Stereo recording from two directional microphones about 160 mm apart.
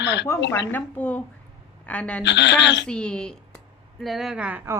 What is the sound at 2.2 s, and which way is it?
Speech, 90° left.